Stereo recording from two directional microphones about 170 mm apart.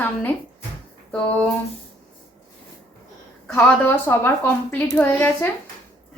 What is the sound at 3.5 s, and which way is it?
A child's voice, 10° left (ahead or behind).